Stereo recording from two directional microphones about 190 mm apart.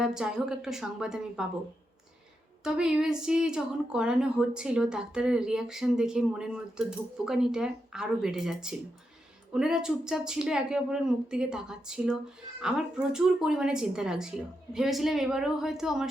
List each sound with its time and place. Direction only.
0.0 s a woman's voice: 5° right (ahead or behind)
2.6 s a woman's voice: 5° right (ahead or behind)